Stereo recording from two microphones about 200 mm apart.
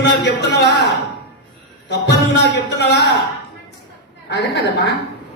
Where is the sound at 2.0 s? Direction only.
55° left (ahead or behind).